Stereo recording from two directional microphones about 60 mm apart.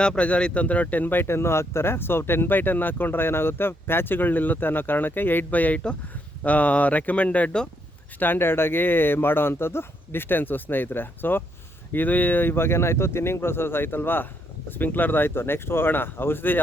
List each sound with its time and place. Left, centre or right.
0.0 s speech: centre
8.2 s speech: left